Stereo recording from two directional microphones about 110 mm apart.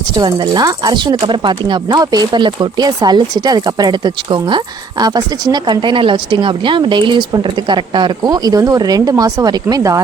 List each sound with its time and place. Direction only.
0.2 s speech: 40° right (ahead or behind)